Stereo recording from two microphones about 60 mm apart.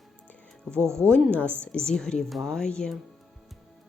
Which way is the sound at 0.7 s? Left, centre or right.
Right.